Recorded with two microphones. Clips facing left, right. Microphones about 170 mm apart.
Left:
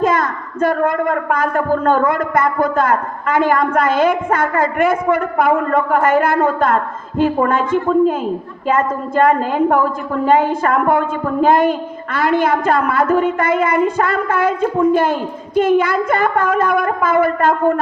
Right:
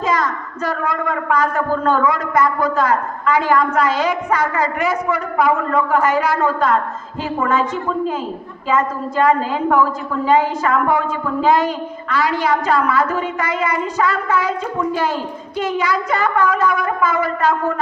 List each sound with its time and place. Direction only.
0.0 s a woman's voice: 55° left (ahead or behind)